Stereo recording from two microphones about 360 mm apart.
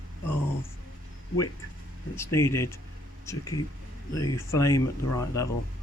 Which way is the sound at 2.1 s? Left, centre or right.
Centre.